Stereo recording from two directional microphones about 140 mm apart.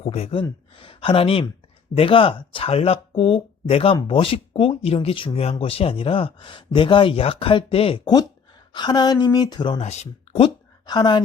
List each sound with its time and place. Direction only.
0.0 s speech: 50° left (ahead or behind); by 9.8 s 35° left (ahead or behind)
9.8 s speech: 50° left (ahead or behind); by 11.2 s 35° left (ahead or behind)